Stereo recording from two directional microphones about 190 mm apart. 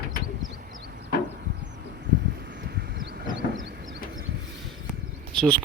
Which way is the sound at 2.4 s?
65° right (ahead or behind).